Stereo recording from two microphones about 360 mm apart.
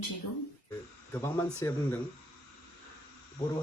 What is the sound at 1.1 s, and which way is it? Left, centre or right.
Speech, centre.